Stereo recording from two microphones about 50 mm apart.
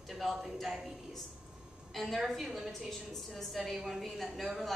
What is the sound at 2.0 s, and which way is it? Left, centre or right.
A woman's voice, centre.